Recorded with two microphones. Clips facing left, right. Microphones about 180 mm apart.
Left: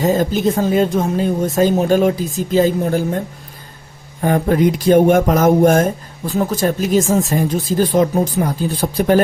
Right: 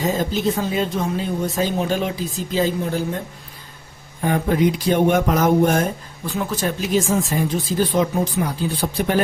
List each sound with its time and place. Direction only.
0.0 s speech: 45° left (ahead or behind)
4.2 s speech: 45° left (ahead or behind)